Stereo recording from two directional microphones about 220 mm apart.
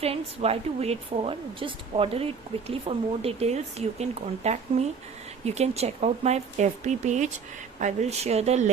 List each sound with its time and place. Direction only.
0.0 s a woman's voice: 25° right (ahead or behind)